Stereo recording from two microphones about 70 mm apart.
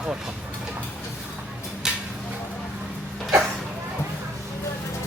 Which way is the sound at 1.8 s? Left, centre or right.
Centre.